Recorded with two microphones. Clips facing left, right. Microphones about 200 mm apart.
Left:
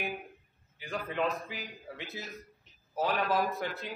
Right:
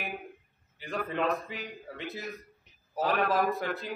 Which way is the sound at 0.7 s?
Centre (ahead or behind).